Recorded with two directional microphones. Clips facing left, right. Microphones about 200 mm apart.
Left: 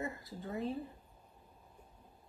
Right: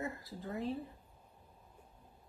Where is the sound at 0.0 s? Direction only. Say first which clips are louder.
Even; centre (ahead or behind).